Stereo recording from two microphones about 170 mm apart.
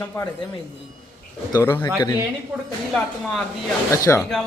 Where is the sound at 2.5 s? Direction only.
5° right (ahead or behind).